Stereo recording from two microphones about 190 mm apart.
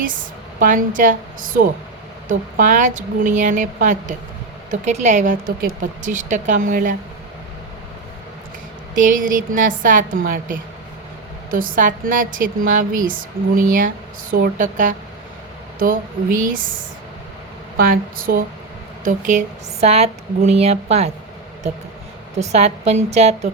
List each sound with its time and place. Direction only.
0.6 s a woman's voice: 45° right (ahead or behind)
9.0 s a woman's voice: 45° right (ahead or behind)
17.7 s a woman's voice: 50° right (ahead or behind); by 21.1 s 35° right (ahead or behind)
22.4 s speech: 35° right (ahead or behind)